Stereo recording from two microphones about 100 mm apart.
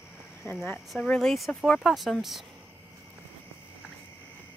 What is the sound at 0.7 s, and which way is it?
Speech, centre (ahead or behind).